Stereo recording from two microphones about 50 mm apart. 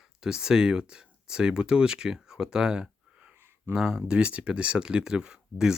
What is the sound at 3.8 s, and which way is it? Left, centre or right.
Speech, centre.